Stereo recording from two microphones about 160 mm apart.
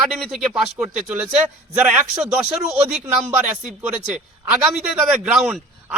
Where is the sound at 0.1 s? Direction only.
Centre (ahead or behind).